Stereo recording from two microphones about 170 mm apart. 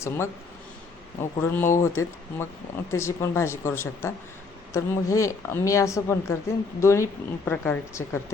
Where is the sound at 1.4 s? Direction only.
10° left (ahead or behind).